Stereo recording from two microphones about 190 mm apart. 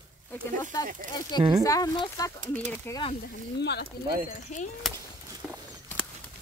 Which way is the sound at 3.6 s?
60° left (ahead or behind).